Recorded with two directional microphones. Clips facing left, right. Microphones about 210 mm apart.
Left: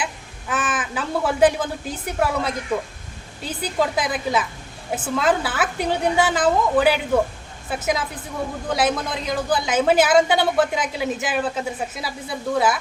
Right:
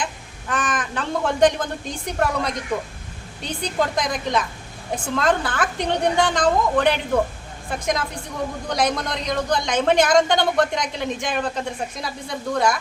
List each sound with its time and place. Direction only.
0.0 s speech: 5° left (ahead or behind)